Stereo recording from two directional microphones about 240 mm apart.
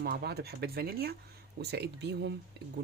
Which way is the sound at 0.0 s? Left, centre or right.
Right.